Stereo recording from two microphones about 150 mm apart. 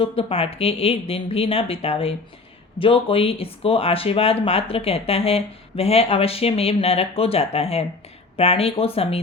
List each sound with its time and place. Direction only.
0.0 s speech: 40° left (ahead or behind)